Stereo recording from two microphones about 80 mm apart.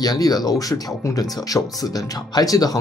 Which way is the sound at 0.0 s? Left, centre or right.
Left.